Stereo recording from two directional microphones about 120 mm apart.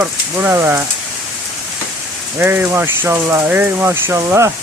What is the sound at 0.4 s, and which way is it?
Speech, 20° right (ahead or behind).